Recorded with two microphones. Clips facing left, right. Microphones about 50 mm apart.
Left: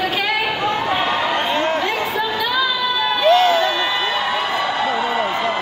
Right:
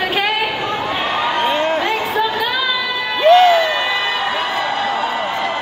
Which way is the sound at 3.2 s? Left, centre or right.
Centre.